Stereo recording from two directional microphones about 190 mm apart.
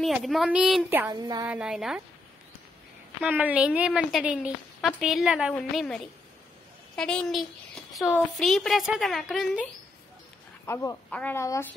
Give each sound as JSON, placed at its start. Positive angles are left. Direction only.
{"t": 0.0, "sound": "a woman's voice", "side_deg": 0}
{"t": 0.8, "sound": "a sound", "side_deg": -15}
{"t": 1.5, "sound": "a woman's voice", "side_deg": -5}
{"t": 3.2, "sound": "a woman's voice", "side_deg": -10}
{"t": 10.6, "sound": "speech", "side_deg": 15}